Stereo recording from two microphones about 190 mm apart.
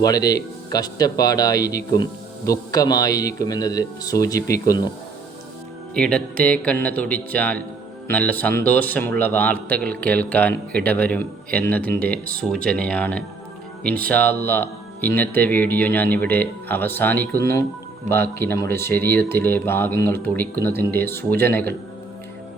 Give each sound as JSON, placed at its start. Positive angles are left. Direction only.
{"t": 0.0, "sound": "speech", "side_deg": 20}
{"t": 5.9, "sound": "speech", "side_deg": 5}